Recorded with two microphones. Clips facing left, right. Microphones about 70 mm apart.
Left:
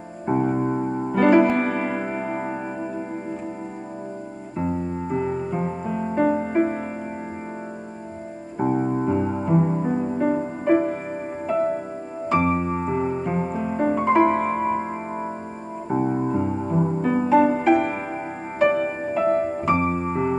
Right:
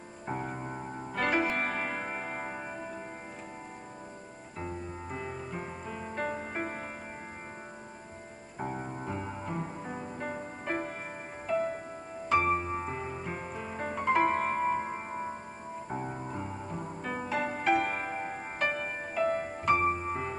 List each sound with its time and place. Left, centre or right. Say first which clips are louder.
0.3 s music: left 14 dB; centre
0.6 s keyboard: left 15 dB; left
1.1 s music: left 13 dB; centre
4.6 s music: left 13 dB; centre
8.5 s music: left 15 dB; left
10.1 s music: left 15 dB; centre
15.9 s keyboard: left 16 dB; left
17.0 s music: left 15 dB; centre